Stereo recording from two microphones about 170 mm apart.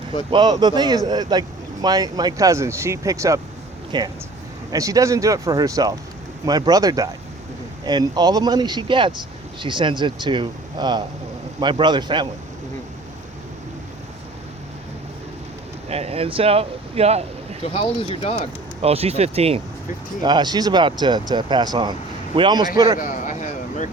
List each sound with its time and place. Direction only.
0.3 s speech: 25° right (ahead or behind)
15.9 s speech: 35° right (ahead or behind)
17.6 s speech: 35° left (ahead or behind)
18.8 s speech: 35° right (ahead or behind)
20.2 s speech: 25° right (ahead or behind)
23.0 s a sound: 50° left (ahead or behind)